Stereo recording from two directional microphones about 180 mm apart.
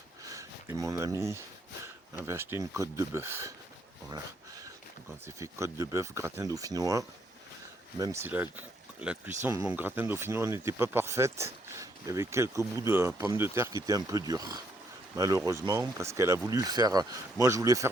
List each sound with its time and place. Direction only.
0.3 s speech: 20° right (ahead or behind)
4.1 s a sound: 20° right (ahead or behind)
5.4 s speech: 15° right (ahead or behind)